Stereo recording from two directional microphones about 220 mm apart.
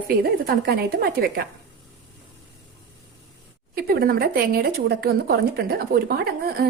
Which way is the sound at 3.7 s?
40° right (ahead or behind).